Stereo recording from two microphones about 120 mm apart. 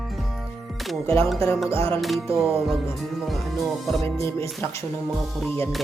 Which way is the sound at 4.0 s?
25° left (ahead or behind).